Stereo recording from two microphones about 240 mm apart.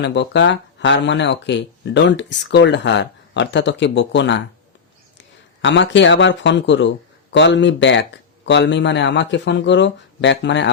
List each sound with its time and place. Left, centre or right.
0.0 s speech: left
5.6 s speech: left